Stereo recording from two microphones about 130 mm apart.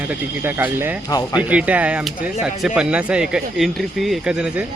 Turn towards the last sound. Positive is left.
turn(degrees=-5)  # may be behind; listen again after turning